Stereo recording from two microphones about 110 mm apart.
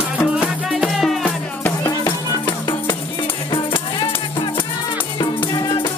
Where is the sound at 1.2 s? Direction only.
15° left (ahead or behind).